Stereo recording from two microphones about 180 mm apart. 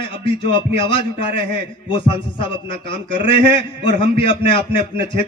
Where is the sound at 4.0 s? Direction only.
30° left (ahead or behind).